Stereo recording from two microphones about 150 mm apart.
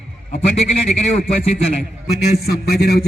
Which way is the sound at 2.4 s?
90° left.